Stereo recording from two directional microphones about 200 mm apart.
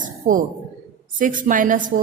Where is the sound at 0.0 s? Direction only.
40° right (ahead or behind).